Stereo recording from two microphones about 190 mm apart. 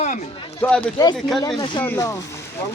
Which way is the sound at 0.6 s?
10° left (ahead or behind).